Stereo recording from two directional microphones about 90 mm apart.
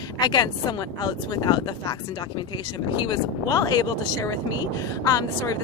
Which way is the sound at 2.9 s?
55° left (ahead or behind).